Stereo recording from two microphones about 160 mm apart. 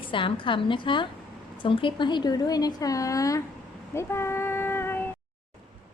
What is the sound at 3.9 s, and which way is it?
Child singing, 15° left (ahead or behind).